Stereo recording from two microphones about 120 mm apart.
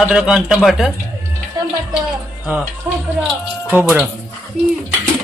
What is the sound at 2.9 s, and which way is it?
A man's voice, 15° right (ahead or behind).